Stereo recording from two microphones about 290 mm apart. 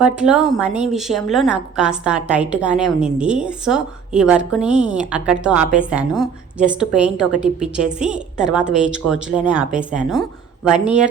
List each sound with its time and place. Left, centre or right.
0.0 s a woman's voice: centre